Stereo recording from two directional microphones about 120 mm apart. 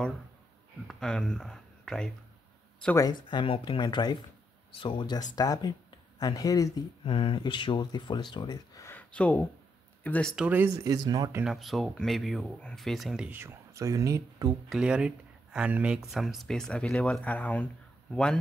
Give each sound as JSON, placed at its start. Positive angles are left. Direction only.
{"t": 0.8, "sound": "speech", "side_deg": 5}
{"t": 3.0, "sound": "speech", "side_deg": 35}
{"t": 7.1, "sound": "speech", "side_deg": 45}
{"t": 8.8, "sound": "speech", "side_deg": 15}
{"t": 10.3, "sound": "speech", "side_deg": -10}
{"t": 10.9, "sound": "speech", "side_deg": -30}
{"t": 11.4, "sound": "speech", "side_deg": 0}
{"t": 13.4, "sound": "speech", "side_deg": -25}
{"t": 14.8, "sound": "speech", "side_deg": -10}